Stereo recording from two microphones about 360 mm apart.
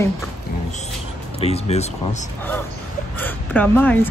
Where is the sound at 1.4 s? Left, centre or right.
Centre.